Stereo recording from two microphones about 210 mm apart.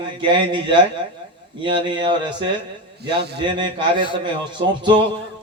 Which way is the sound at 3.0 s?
50° right (ahead or behind).